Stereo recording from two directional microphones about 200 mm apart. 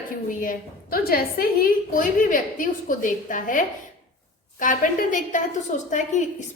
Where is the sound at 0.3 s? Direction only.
40° left (ahead or behind).